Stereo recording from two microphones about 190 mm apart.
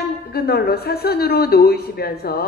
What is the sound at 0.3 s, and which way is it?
A woman's voice, 55° left (ahead or behind).